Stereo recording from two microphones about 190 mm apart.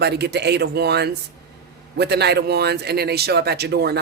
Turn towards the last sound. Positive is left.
turn(degrees=-60)  # may be behind; listen again after turning